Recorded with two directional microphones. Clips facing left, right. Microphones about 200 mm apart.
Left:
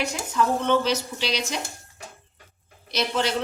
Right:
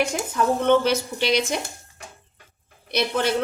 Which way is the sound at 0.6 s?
55° right (ahead or behind).